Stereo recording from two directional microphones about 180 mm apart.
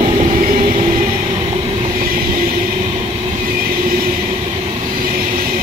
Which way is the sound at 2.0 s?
50° right (ahead or behind).